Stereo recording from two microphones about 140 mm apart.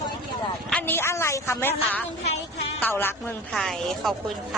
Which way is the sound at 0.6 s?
10° left (ahead or behind).